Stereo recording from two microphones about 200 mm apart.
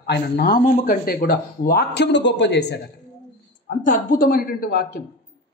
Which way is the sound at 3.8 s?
40° left (ahead or behind).